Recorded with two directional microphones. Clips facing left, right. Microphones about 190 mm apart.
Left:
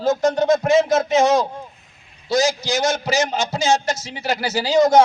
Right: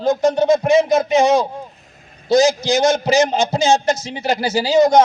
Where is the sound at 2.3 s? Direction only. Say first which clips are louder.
Right 5 dB; 20° right (ahead or behind).